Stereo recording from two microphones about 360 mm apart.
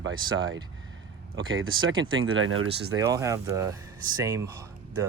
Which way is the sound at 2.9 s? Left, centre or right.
Centre.